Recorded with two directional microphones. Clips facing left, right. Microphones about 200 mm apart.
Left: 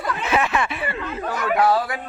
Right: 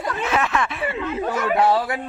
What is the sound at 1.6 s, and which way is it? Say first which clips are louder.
Speech: left 1 dB; 25° right (ahead or behind).